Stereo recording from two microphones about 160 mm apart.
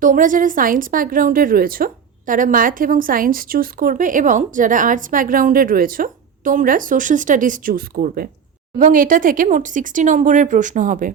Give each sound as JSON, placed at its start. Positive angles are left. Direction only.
{"t": 0.0, "sound": "speech", "side_deg": -55}